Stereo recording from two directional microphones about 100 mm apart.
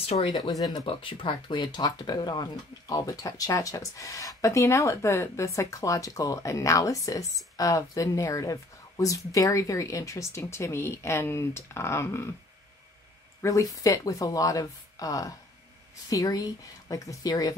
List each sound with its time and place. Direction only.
0.0 s speech: 90° left
0.3 s speech: 40° left (ahead or behind)
0.8 s speech: 60° left (ahead or behind); by 12.3 s 25° left (ahead or behind)
13.4 s speech: 30° left (ahead or behind)